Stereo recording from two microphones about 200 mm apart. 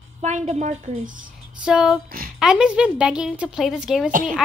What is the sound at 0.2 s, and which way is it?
Speech, 35° right (ahead or behind).